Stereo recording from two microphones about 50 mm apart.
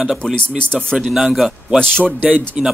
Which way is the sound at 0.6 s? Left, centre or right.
Left.